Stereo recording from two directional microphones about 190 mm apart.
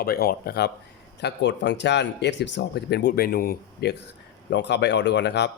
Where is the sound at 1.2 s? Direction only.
70° left (ahead or behind).